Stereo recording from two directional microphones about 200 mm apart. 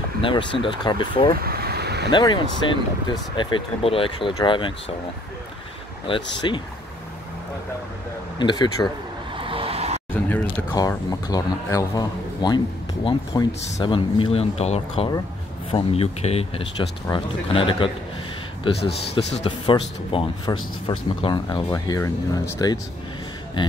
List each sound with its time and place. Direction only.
0.2 s speech: 25° left (ahead or behind)
1.4 s vehicle: 50° right (ahead or behind)
2.0 s speech: 20° left (ahead or behind)
6.1 s speech: 25° left (ahead or behind)
8.4 s speech: 20° left (ahead or behind)
9.3 s vehicle: 25° right (ahead or behind)
10.1 s a sound: 10° left (ahead or behind)
10.4 s speech: 20° left (ahead or behind)